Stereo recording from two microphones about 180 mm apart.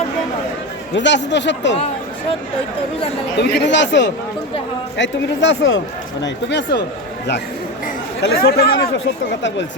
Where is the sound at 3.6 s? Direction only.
80° left.